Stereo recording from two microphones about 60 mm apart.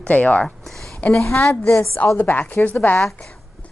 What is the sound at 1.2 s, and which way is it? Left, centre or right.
Speech, left.